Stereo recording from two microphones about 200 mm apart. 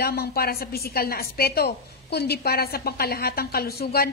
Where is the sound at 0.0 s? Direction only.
50° left (ahead or behind).